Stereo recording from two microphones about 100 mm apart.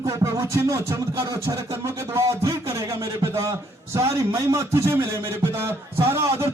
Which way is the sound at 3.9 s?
30° right (ahead or behind).